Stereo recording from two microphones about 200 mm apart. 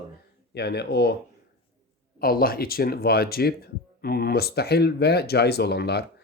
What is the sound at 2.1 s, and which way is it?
Speech, 50° left (ahead or behind).